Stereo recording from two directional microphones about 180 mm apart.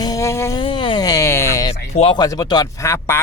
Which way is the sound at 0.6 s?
25° left (ahead or behind).